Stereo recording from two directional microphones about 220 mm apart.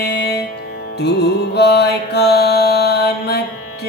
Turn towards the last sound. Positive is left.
turn(degrees=50)  # may be behind; listen again after turning